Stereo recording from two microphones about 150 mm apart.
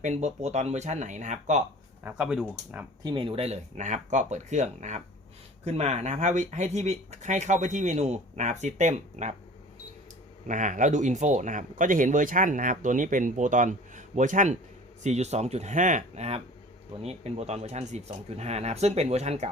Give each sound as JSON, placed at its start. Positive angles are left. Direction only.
{"t": 0.0, "sound": "speech", "side_deg": -50}
{"t": 2.0, "sound": "speech", "side_deg": -10}
{"t": 3.0, "sound": "speech", "side_deg": -30}
{"t": 10.4, "sound": "speech", "side_deg": -55}